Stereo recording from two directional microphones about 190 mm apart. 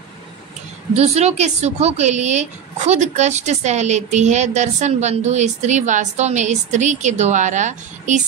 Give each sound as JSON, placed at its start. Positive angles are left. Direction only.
{"t": 0.9, "sound": "speech", "side_deg": -35}